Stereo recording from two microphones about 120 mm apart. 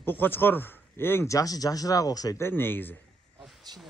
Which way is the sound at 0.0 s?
15° left (ahead or behind).